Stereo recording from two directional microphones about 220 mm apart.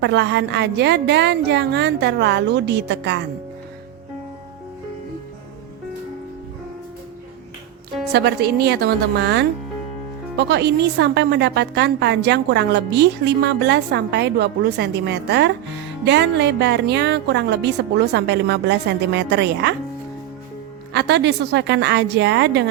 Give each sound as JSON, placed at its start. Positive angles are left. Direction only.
{"t": 0.0, "sound": "a woman's voice", "side_deg": -50}
{"t": 8.1, "sound": "a woman's voice", "side_deg": -45}
{"t": 20.9, "sound": "a woman's voice", "side_deg": -50}